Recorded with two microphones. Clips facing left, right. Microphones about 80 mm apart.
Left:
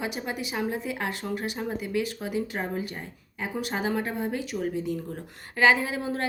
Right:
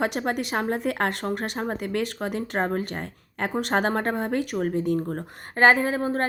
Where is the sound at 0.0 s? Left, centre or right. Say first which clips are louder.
Right 6 dB; right.